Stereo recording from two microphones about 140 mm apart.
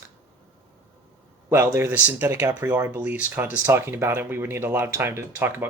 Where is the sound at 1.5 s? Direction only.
15° right (ahead or behind).